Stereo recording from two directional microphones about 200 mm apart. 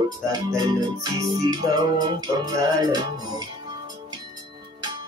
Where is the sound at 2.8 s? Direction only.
20° right (ahead or behind).